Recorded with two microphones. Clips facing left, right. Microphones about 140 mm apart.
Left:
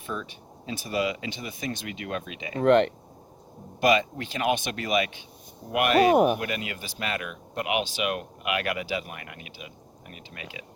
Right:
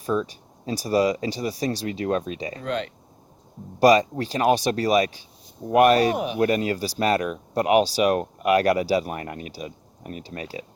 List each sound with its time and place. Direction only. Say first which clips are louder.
0.0 s speech: right 10 dB; 40° right (ahead or behind)
2.6 s speech: left 12 dB; 60° left (ahead or behind)
3.8 s speech: right 6 dB; 35° right (ahead or behind)
6.1 s speech: left 7 dB; 50° left (ahead or behind)
6.4 s speech: right 11 dB; 35° right (ahead or behind)